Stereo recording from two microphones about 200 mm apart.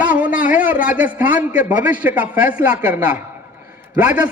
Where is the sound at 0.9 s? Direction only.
45° left (ahead or behind).